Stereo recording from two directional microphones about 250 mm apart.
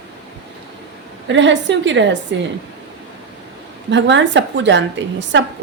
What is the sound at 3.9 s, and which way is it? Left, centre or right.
A woman's voice, right.